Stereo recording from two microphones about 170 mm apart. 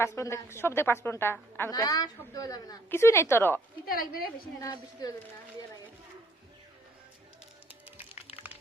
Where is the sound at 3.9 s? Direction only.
60° left (ahead or behind).